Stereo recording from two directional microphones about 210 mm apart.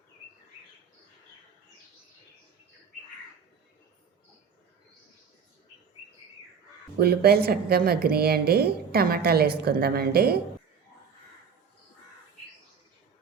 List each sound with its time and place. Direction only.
7.0 s a woman's voice: 50° right (ahead or behind)